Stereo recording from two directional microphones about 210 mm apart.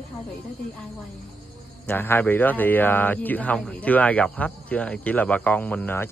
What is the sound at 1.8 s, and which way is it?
A man's voice, 10° left (ahead or behind).